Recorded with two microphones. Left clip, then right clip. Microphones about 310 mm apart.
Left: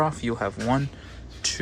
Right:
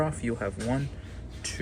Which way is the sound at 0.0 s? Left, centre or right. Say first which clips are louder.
Left 5 dB; centre.